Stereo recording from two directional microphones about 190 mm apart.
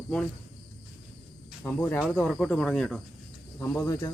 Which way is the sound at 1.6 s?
10° left (ahead or behind).